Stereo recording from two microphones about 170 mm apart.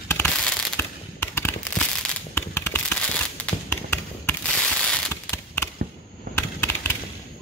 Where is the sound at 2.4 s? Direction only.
15° left (ahead or behind).